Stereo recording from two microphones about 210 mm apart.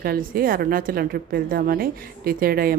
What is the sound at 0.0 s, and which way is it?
A woman's voice, 45° right (ahead or behind).